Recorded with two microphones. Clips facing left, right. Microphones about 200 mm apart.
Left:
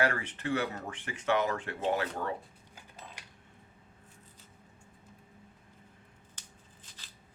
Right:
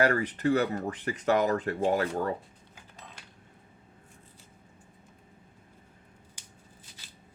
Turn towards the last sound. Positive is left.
turn(degrees=-10)  # may be behind; listen again after turning